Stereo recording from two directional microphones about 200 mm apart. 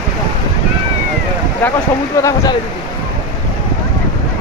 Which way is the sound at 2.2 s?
15° left (ahead or behind).